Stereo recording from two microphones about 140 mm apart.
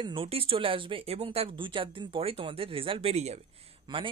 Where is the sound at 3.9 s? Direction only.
30° right (ahead or behind).